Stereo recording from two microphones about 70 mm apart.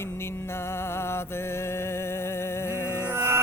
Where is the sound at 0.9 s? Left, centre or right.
Left.